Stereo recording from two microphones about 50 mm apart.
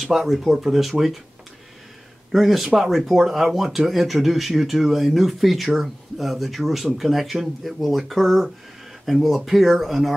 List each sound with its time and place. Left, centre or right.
0.0 s speech: centre
2.3 s speech: centre